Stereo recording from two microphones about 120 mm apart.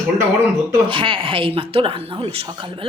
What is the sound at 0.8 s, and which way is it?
A woman's voice, 45° right (ahead or behind).